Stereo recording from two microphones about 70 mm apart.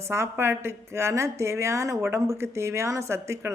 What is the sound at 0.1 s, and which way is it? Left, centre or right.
A woman's voice, right.